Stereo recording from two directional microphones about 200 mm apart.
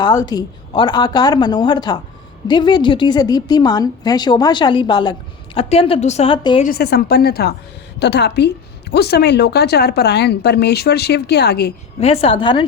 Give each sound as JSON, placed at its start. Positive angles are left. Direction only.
{"t": 0.0, "sound": "a woman's voice", "side_deg": 20}
{"t": 6.6, "sound": "a woman's voice", "side_deg": 50}
{"t": 11.9, "sound": "a woman's voice", "side_deg": 30}